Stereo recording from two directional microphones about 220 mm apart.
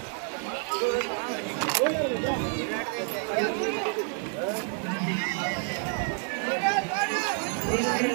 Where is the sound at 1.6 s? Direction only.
Centre (ahead or behind).